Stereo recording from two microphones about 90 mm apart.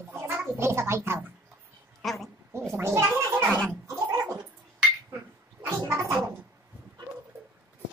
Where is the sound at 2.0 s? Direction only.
5° left (ahead or behind).